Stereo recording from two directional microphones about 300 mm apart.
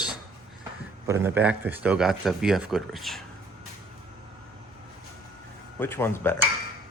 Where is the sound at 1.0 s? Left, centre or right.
Centre.